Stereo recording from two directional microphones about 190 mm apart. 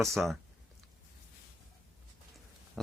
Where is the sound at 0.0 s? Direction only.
Centre (ahead or behind).